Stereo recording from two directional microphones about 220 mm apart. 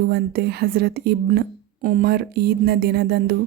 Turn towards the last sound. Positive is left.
turn(degrees=-45)  # may be behind; listen again after turning